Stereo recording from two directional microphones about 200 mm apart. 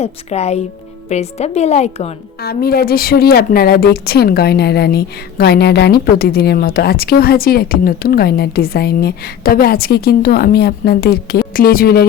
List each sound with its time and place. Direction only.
0.0 s a woman's voice: 30° left (ahead or behind)
2.4 s speech: 50° left (ahead or behind)